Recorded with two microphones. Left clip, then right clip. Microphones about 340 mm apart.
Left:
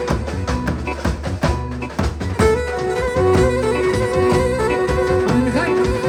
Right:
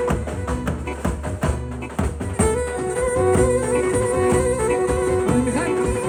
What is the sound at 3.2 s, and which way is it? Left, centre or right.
Music, left.